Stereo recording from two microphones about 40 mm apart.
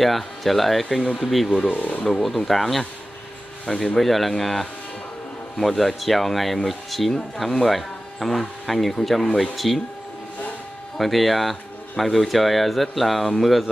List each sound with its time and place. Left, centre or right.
0.0 s speech: centre
1.7 s speech: left
2.2 s speech: centre
11.0 s speech: centre